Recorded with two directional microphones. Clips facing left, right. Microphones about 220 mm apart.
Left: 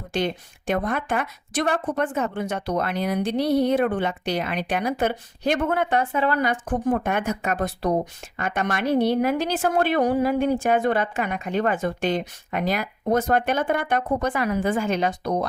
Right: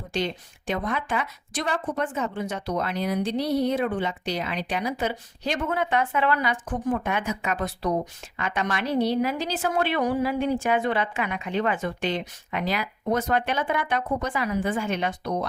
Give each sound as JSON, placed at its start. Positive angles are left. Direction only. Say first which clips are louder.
{"t": 0.1, "sound": "a woman's voice", "louder": "left 3 dB", "side_deg": 50}
{"t": 5.9, "sound": "a woman's voice", "louder": "left 2 dB", "side_deg": 35}